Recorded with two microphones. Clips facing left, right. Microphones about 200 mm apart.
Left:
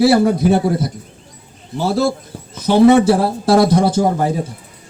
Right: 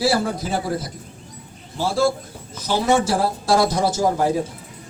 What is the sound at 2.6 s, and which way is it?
A man's voice, 60° left (ahead or behind).